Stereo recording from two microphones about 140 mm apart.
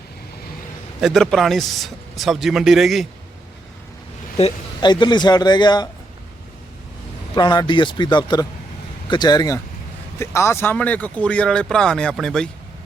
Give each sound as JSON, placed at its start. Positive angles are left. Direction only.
{"t": 1.0, "sound": "speech", "side_deg": 0}
{"t": 4.8, "sound": "a man's voice", "side_deg": 30}
{"t": 7.3, "sound": "a man's voice", "side_deg": 30}
{"t": 10.2, "sound": "speech", "side_deg": 20}